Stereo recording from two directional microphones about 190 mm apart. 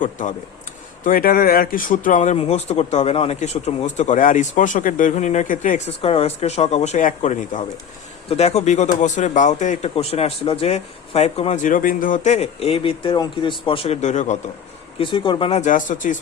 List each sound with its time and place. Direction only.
0.0 s speech: 40° left (ahead or behind)
14.9 s speech: 25° left (ahead or behind); by 16.1 s 45° left (ahead or behind)